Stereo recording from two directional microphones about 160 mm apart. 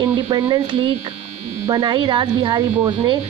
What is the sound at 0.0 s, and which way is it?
Speech, 30° right (ahead or behind).